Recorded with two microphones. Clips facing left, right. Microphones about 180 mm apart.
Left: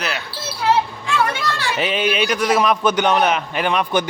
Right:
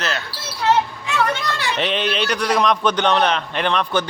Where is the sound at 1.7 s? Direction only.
5° left (ahead or behind).